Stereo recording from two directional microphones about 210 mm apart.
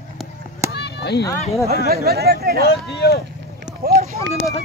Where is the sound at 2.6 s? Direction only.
50° left (ahead or behind).